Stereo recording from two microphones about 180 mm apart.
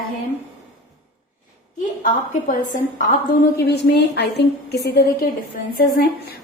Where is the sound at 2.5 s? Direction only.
50° left (ahead or behind).